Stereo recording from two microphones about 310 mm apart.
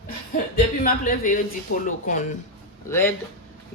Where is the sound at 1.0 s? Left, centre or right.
Left.